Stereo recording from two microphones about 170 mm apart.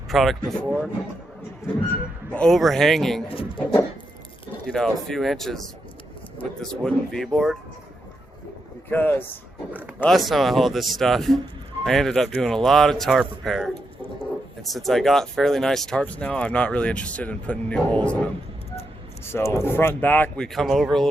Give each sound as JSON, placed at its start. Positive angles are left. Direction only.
{"t": 0.1, "sound": "speech", "side_deg": 0}
{"t": 2.3, "sound": "speech", "side_deg": 5}
{"t": 3.2, "sound": "speech", "side_deg": 30}
{"t": 4.6, "sound": "speech", "side_deg": 0}
{"t": 8.9, "sound": "speech", "side_deg": 10}
{"t": 10.0, "sound": "speech", "side_deg": 0}
{"t": 19.2, "sound": "speech", "side_deg": 15}